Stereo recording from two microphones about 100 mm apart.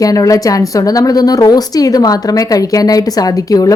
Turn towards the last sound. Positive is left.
turn(degrees=40)  # may be behind; listen again after turning